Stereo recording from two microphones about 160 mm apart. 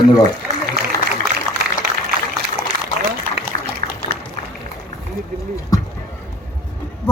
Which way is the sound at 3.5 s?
65° right (ahead or behind).